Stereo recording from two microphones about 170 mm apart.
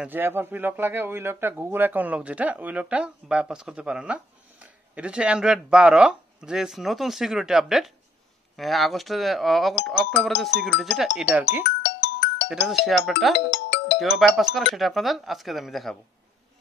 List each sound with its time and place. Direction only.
0.0 s a man's voice: 10° right (ahead or behind)
11.8 s music: 80° left
12.4 s a man's voice: 5° right (ahead or behind)
13.5 s music: 75° left (ahead or behind)
13.9 s a man's voice: centre (ahead or behind)